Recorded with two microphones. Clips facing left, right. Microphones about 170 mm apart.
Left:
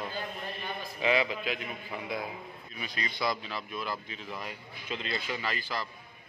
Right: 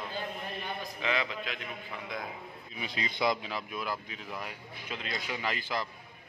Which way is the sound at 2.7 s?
20° right (ahead or behind).